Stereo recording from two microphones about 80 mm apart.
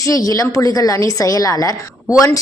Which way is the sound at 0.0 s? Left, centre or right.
Left.